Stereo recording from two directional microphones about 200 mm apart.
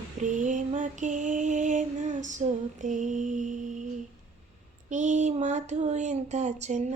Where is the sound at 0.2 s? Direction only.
40° right (ahead or behind).